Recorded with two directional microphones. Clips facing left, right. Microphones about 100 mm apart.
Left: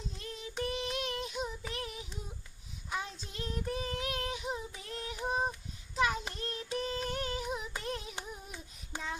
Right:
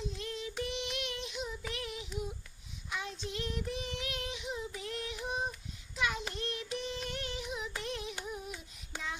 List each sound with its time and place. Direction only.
0.2 s child singing: 35° left (ahead or behind)